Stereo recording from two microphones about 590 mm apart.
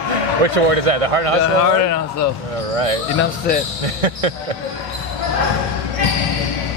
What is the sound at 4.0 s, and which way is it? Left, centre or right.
Speech, right.